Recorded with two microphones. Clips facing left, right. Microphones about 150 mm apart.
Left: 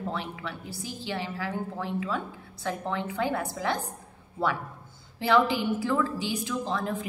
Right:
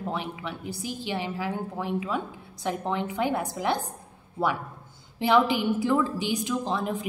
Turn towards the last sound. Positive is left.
turn(degrees=-15)  # may be behind; listen again after turning